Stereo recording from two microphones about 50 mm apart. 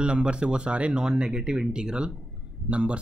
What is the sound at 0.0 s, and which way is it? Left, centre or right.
Speech, centre.